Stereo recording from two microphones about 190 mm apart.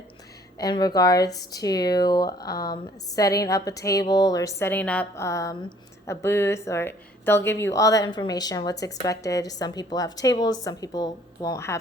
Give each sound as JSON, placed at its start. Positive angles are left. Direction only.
{"t": 0.6, "sound": "a woman's voice", "side_deg": 20}